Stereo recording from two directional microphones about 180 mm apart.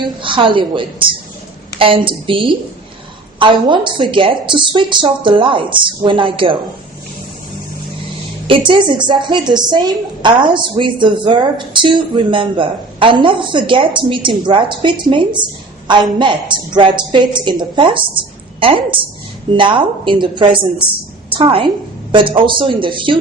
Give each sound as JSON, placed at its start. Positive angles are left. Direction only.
{"t": 0.2, "sound": "a woman's voice", "side_deg": -30}
{"t": 8.4, "sound": "a woman's voice", "side_deg": -30}